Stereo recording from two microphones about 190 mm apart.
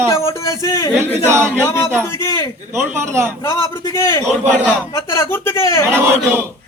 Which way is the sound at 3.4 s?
15° left (ahead or behind).